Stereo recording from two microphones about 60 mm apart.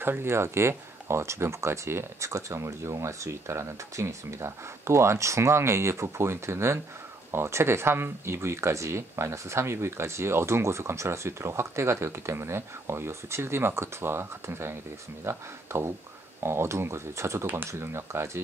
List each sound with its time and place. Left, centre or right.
0.0 s speech: right